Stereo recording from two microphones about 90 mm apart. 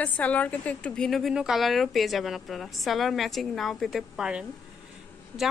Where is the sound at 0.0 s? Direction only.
15° left (ahead or behind).